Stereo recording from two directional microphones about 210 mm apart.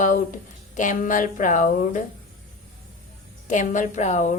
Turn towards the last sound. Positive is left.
turn(degrees=35)  # may be behind; listen again after turning